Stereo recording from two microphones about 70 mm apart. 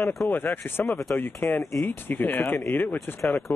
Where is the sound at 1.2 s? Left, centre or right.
Left.